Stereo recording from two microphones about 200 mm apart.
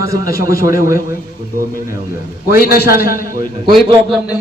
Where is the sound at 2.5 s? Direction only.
50° left (ahead or behind).